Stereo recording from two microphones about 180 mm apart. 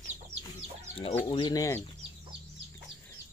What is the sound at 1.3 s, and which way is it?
Speech, 25° left (ahead or behind).